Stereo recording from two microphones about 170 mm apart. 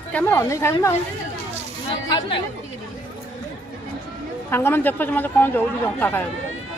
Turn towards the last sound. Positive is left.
turn(degrees=10)  # may be behind; listen again after turning